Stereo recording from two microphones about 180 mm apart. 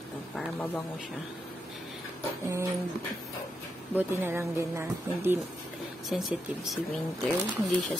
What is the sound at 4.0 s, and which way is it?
Speech, 10° right (ahead or behind).